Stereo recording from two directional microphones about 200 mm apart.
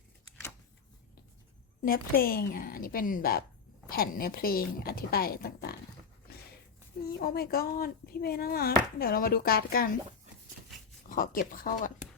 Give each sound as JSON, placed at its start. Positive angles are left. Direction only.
{"t": 1.8, "sound": "speech", "side_deg": 45}
{"t": 7.1, "sound": "speech", "side_deg": 50}
{"t": 11.1, "sound": "speech", "side_deg": 45}